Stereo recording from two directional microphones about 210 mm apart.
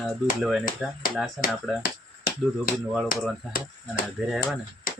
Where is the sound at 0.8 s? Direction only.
Centre (ahead or behind).